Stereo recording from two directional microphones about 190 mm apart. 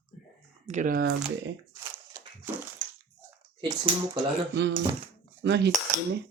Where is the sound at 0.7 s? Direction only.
45° right (ahead or behind).